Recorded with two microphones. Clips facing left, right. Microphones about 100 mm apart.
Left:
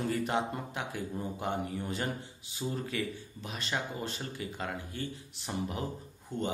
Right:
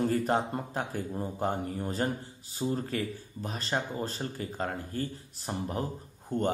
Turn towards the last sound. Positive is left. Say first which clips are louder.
# right 5 dB
turn(degrees=-50)  # may be behind; listen again after turning